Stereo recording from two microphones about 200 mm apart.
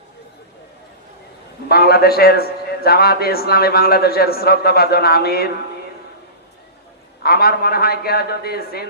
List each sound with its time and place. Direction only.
1.7 s a man's voice: 50° left (ahead or behind)
7.2 s a man's voice: 50° left (ahead or behind)